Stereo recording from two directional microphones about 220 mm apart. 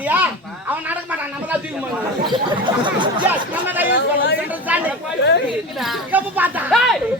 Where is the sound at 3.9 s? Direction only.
50° left (ahead or behind).